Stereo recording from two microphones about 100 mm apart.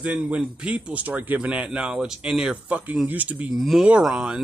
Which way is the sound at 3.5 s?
5° right (ahead or behind).